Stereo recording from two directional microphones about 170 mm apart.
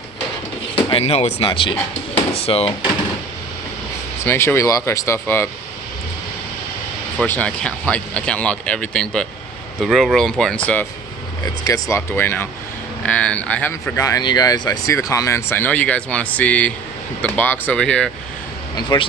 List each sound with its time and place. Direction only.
0.9 s speech: 35° left (ahead or behind)
4.3 s speech: 15° left (ahead or behind)
7.3 s speech: 5° left (ahead or behind)
11.4 s speech: 20° left (ahead or behind); by 18.1 s 5° left (ahead or behind)
18.8 s speech: 25° left (ahead or behind)